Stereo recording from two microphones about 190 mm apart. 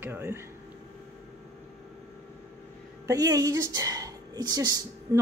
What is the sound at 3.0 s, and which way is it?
A woman's voice, 20° right (ahead or behind).